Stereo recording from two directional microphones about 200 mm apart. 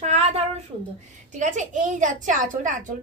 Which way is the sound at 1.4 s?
40° right (ahead or behind).